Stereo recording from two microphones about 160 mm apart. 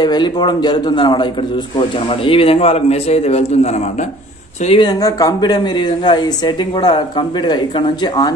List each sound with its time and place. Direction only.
0.0 s speech: 25° left (ahead or behind)
4.6 s speech: 30° left (ahead or behind)